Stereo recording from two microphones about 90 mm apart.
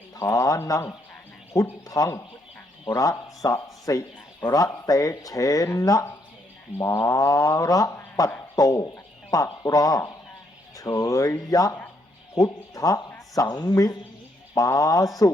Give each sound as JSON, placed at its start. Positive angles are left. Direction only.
{"t": 0.2, "sound": "speech", "side_deg": 40}